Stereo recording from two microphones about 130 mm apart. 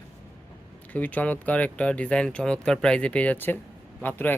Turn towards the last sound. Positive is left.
turn(degrees=15)  # may be behind; listen again after turning